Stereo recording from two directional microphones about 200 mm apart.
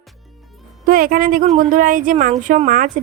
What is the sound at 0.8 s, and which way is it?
A woman's voice, 45° right (ahead or behind).